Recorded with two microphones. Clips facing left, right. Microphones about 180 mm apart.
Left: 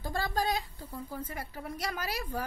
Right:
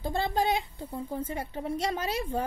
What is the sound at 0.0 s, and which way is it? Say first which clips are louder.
Speech: right 4 dB; 25° right (ahead or behind).